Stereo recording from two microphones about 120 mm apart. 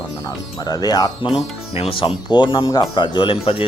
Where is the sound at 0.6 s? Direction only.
35° left (ahead or behind).